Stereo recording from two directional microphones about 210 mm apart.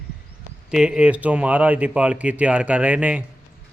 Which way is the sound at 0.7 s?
5° right (ahead or behind).